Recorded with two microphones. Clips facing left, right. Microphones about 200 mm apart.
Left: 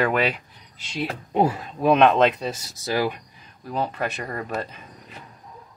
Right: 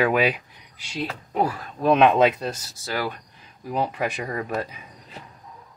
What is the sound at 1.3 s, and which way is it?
Speech, 25° left (ahead or behind).